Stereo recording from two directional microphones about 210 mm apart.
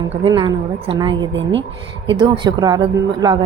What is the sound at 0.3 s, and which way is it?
A woman's voice, 20° right (ahead or behind).